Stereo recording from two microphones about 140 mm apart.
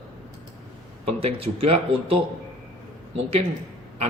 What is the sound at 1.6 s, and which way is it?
Speech, 45° right (ahead or behind).